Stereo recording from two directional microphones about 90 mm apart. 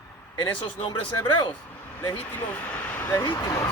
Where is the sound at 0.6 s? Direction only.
70° left (ahead or behind).